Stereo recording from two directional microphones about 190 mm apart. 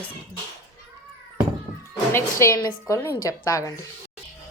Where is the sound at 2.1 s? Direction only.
15° left (ahead or behind).